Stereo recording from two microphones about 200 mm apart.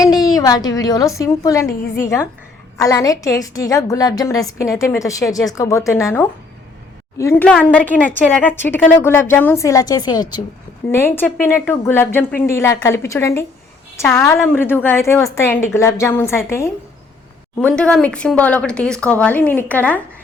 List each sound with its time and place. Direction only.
0.0 s a woman's voice: 20° left (ahead or behind)
2.7 s a woman's voice: 15° left (ahead or behind)